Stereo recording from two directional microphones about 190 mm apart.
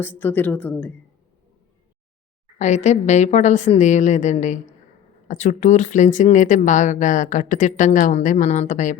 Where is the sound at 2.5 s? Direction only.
40° left (ahead or behind).